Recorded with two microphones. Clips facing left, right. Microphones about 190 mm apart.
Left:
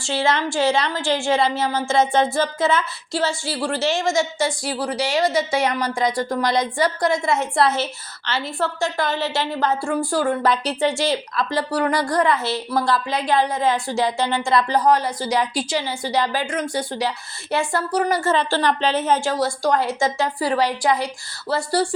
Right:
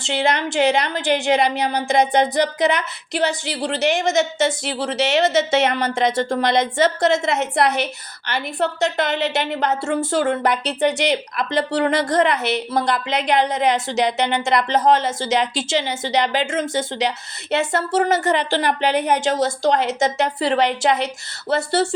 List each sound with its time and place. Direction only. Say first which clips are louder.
0.0 s a woman's voice: even; 20° right (ahead or behind)